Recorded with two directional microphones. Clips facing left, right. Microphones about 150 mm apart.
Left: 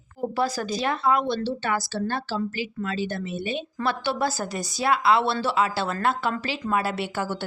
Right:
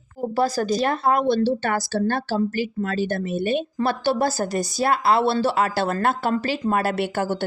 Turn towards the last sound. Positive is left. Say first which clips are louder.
# right 5 dB
turn(degrees=-50)  # may be behind; listen again after turning